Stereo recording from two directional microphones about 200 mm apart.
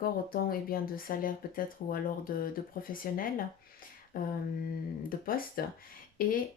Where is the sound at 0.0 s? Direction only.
45° left (ahead or behind).